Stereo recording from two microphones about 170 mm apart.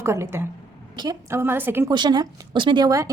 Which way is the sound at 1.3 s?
15° right (ahead or behind).